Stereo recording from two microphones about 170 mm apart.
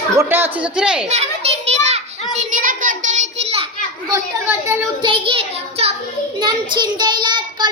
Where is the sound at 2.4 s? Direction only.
50° right (ahead or behind).